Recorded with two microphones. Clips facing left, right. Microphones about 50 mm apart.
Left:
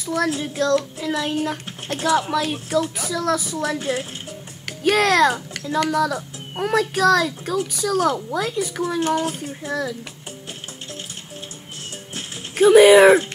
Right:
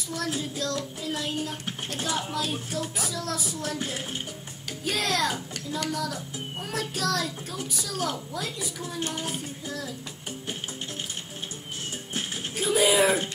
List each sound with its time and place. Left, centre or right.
0.0 s child singing: left
6.6 s a child's voice: left
12.5 s a child's voice: left